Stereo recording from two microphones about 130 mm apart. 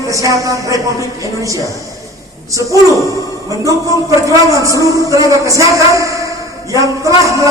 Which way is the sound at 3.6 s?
25° right (ahead or behind).